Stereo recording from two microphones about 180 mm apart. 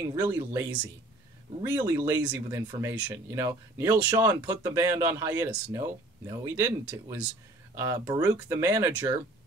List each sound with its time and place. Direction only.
0.1 s speech: 15° right (ahead or behind)